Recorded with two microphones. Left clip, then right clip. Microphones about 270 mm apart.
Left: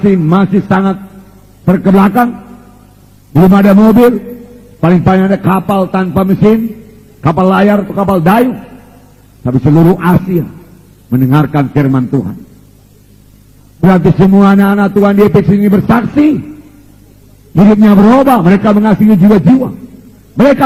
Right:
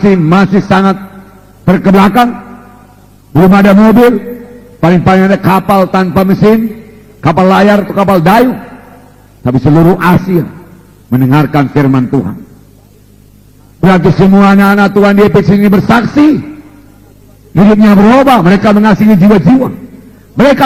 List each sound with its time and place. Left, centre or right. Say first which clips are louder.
0.0 s a man's voice: right 3 dB; right
13.8 s a man's voice: right 2 dB; right
17.6 s a man's voice: right 1 dB; right